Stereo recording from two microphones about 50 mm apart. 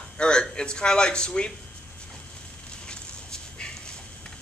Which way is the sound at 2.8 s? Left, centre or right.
Centre.